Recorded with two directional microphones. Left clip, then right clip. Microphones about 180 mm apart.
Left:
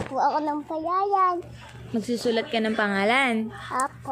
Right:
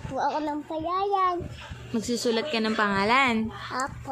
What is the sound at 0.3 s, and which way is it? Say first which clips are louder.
Speech: left 3 dB; 10° right (ahead or behind).